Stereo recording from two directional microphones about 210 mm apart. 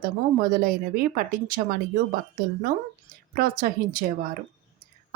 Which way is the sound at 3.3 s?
45° right (ahead or behind).